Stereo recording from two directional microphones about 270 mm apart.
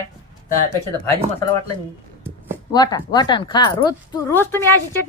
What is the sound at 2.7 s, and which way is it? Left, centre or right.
Speech, centre.